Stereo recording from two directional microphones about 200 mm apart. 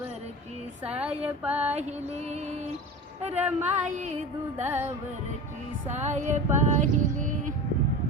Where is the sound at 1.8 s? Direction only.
35° right (ahead or behind).